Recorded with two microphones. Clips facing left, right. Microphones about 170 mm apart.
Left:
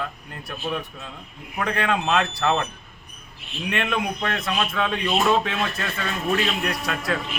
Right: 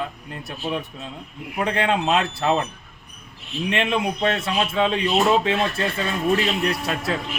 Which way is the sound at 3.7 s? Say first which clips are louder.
Right 2 dB; 25° right (ahead or behind).